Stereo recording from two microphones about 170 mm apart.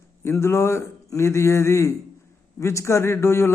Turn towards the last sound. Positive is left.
turn(degrees=15)  # may be behind; listen again after turning